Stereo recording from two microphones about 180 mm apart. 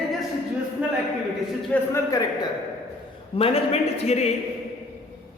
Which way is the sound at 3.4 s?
30° left (ahead or behind).